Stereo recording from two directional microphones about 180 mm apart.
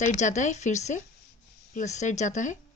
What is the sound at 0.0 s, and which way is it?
Speech, 40° left (ahead or behind).